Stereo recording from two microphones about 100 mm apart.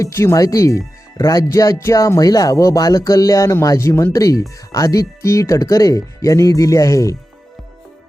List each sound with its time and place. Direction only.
0.0 s speech: 25° left (ahead or behind)